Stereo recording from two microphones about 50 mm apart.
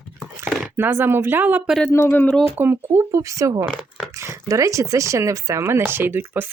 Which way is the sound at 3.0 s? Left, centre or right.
Right.